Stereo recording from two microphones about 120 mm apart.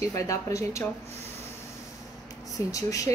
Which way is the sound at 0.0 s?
25° left (ahead or behind).